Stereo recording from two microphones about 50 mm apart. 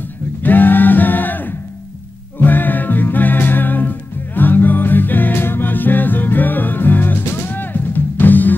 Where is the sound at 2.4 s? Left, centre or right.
Left.